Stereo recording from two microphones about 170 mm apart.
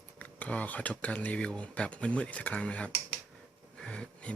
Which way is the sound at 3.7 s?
5° left (ahead or behind).